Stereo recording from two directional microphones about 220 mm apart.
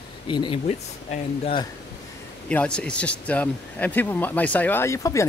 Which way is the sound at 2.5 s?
5° left (ahead or behind).